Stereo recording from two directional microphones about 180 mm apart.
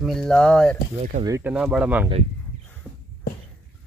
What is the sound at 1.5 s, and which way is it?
Speech, 5° right (ahead or behind).